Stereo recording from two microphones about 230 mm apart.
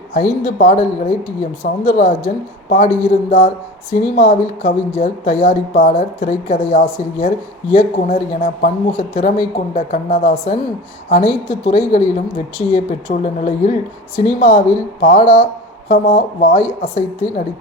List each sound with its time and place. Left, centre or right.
0.1 s speech: left